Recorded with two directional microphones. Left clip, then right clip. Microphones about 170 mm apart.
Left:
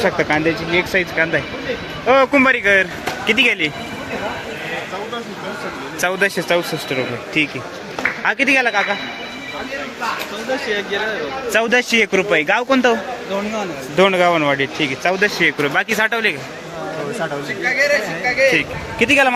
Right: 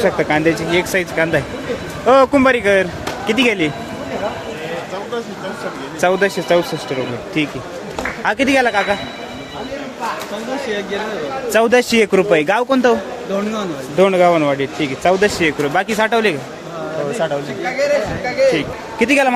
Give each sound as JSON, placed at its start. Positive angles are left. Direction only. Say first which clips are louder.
{"t": 0.0, "sound": "speech", "louder": "right 2 dB", "side_deg": -15}
{"t": 2.0, "sound": "speech", "louder": "right 2 dB", "side_deg": -30}
{"t": 6.0, "sound": "speech", "louder": "right 3 dB", "side_deg": -5}
{"t": 8.2, "sound": "speech", "louder": "right 1 dB", "side_deg": -20}
{"t": 10.7, "sound": "speech", "louder": "even", "side_deg": -90}
{"t": 11.5, "sound": "a man's voice", "louder": "right 3 dB", "side_deg": -30}
{"t": 13.9, "sound": "speech", "louder": "right 2 dB", "side_deg": -5}
{"t": 18.5, "sound": "a man's voice", "louder": "left 2 dB", "side_deg": -10}